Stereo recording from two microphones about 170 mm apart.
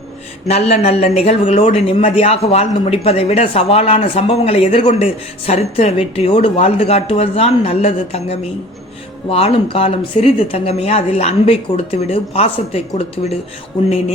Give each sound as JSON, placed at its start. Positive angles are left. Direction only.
{"t": 0.4, "sound": "a man's voice", "side_deg": 40}